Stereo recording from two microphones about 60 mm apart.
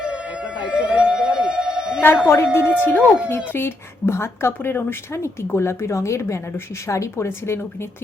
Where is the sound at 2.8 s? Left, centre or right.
Left.